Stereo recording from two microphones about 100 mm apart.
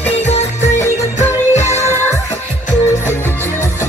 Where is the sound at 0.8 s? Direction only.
30° left (ahead or behind).